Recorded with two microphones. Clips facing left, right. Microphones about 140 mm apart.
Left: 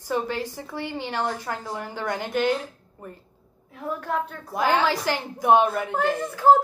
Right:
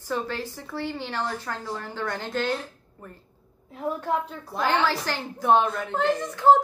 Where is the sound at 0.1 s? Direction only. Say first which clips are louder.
Left 3 dB; 15° left (ahead or behind).